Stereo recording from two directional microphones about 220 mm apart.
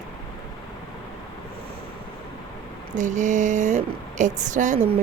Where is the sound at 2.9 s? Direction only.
35° right (ahead or behind).